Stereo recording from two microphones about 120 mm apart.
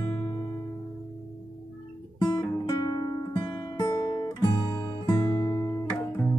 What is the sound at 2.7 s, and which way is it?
Music, 30° left (ahead or behind).